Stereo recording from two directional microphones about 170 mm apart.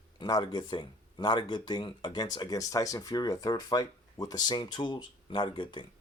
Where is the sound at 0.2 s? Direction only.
25° left (ahead or behind).